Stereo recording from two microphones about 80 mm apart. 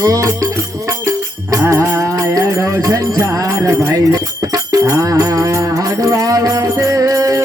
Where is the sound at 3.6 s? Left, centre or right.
Right.